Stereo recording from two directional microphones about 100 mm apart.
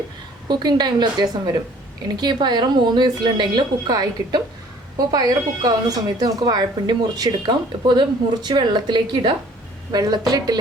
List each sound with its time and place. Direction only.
0.4 s a woman's voice: 45° right (ahead or behind)